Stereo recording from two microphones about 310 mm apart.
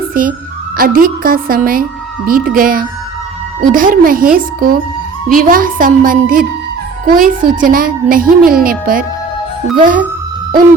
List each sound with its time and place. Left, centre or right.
0.1 s a woman's voice: right